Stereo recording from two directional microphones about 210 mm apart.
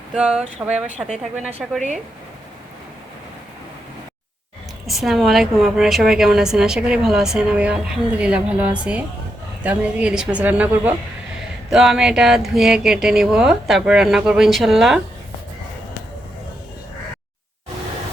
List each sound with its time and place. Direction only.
0.1 s a woman's voice: 5° right (ahead or behind)
4.9 s a woman's voice: centre (ahead or behind)